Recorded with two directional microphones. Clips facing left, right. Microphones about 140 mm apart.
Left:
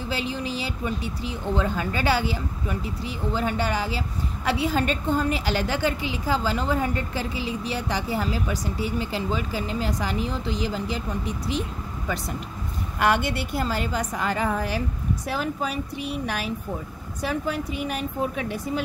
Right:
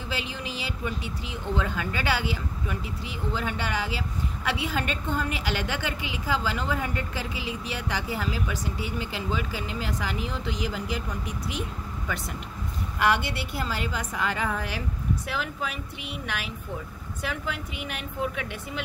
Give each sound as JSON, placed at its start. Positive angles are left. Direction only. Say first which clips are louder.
{"t": 0.1, "sound": "a woman's voice", "louder": "left 5 dB", "side_deg": 35}
{"t": 13.0, "sound": "a woman's voice", "louder": "left 3 dB", "side_deg": 50}